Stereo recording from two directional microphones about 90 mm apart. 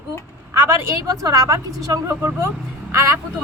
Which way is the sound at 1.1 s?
45° right (ahead or behind).